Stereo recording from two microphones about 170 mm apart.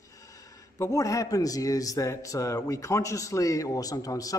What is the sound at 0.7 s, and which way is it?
A man's voice, 20° left (ahead or behind).